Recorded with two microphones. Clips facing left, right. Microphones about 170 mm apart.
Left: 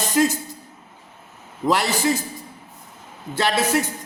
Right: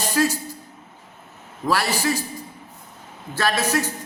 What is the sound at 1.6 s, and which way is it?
Speech, 20° left (ahead or behind).